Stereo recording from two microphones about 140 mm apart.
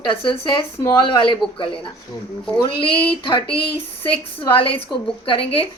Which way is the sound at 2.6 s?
40° left (ahead or behind).